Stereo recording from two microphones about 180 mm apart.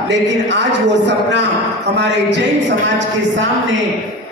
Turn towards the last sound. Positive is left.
turn(degrees=-85)